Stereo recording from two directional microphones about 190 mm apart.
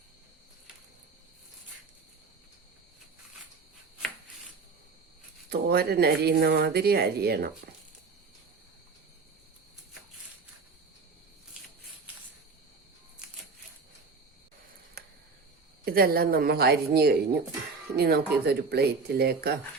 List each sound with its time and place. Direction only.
5.5 s speech: 55° right (ahead or behind)
15.0 s cricket: 55° right (ahead or behind)
15.8 s a woman's voice: 50° right (ahead or behind)